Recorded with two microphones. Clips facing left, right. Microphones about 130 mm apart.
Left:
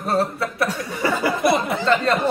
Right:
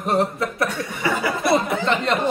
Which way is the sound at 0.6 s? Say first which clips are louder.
Left 4 dB; 40° left (ahead or behind).